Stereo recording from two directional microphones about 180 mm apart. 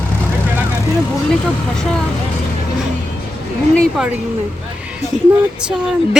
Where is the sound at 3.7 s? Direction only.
Centre (ahead or behind).